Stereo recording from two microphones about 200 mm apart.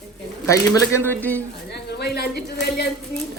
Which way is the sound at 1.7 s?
55° left (ahead or behind).